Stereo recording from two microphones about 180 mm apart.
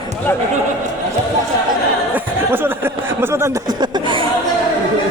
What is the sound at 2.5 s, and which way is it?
Chuckle, 10° right (ahead or behind).